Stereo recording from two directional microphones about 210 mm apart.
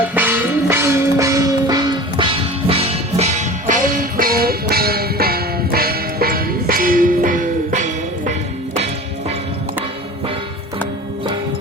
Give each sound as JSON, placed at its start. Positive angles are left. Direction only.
{"t": 0.1, "sound": "music", "side_deg": -10}
{"t": 3.7, "sound": "music", "side_deg": -40}